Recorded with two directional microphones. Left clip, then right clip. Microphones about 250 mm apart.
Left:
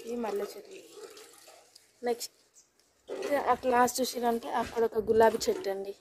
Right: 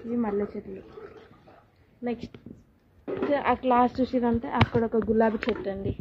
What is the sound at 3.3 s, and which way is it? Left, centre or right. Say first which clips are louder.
Speech: right 3 dB; left.